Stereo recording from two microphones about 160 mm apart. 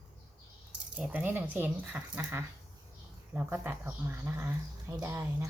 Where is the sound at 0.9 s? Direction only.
10° right (ahead or behind).